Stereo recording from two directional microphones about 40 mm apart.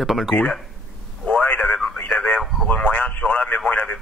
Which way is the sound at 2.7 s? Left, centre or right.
Left.